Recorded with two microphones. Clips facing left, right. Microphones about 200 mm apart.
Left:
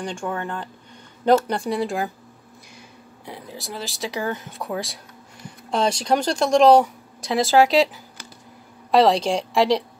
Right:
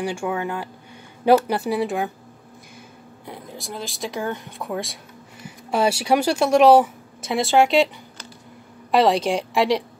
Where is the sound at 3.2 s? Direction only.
Centre (ahead or behind).